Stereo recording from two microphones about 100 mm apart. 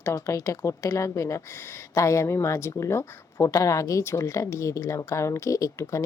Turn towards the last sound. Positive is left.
turn(degrees=30)  # may be behind; listen again after turning